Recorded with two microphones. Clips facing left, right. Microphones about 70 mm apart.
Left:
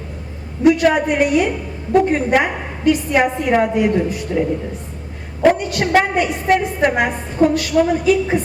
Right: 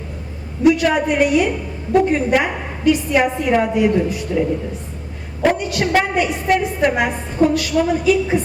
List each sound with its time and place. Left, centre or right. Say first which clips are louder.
0.6 s a woman's voice: left 1 dB; left
5.5 s a woman's voice: left 2 dB; left